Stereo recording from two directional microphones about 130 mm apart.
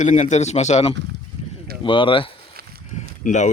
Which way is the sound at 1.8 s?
40° left (ahead or behind).